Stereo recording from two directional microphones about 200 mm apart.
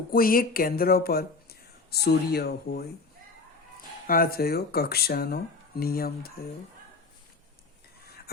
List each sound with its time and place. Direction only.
0.1 s speech: 45° left (ahead or behind)
4.0 s speech: 45° left (ahead or behind)